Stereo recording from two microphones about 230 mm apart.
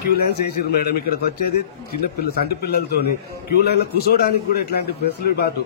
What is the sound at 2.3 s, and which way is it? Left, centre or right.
A man's voice, left.